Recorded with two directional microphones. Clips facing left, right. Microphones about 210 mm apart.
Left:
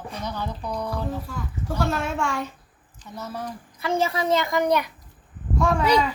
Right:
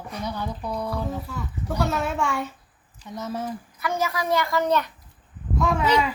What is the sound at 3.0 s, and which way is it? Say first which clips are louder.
Speech: right 3 dB; 20° right (ahead or behind).